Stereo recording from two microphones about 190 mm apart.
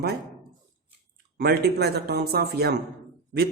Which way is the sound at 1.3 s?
55° right (ahead or behind).